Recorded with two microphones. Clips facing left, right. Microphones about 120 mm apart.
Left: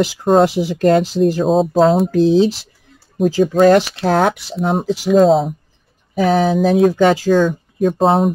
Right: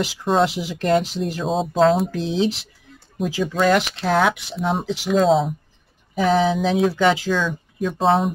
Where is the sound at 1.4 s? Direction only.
Centre (ahead or behind).